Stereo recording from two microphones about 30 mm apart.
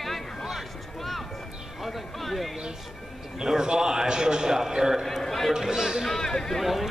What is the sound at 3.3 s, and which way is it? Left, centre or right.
A man's voice, right.